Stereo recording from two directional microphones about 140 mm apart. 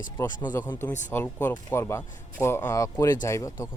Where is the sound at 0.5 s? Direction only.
15° left (ahead or behind).